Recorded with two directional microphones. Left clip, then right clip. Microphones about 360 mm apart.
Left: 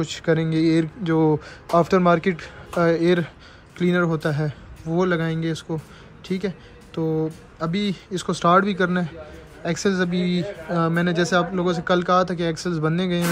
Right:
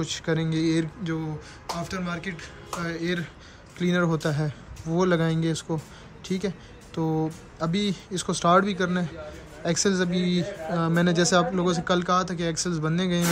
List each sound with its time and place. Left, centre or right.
0.0 s a man's voice: centre